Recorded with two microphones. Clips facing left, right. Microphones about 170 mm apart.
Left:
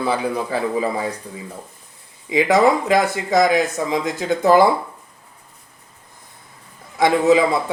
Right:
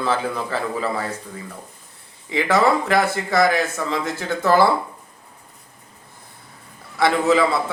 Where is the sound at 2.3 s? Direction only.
15° left (ahead or behind).